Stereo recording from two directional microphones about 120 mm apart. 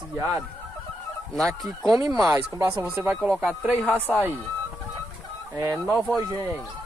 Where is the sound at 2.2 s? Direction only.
20° right (ahead or behind).